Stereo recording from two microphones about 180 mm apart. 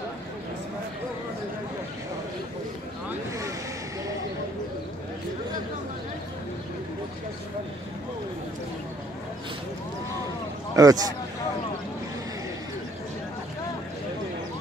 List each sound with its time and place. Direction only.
10.8 s speech: 20° right (ahead or behind)